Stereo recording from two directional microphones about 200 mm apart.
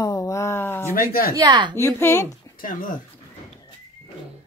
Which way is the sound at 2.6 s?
40° left (ahead or behind).